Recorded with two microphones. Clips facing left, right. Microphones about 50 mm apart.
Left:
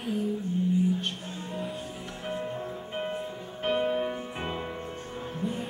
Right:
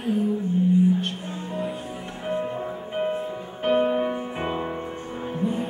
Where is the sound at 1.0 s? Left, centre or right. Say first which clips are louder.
Right 4 dB; centre.